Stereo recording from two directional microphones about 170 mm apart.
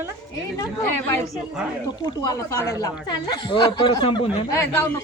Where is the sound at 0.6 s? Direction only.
15° left (ahead or behind).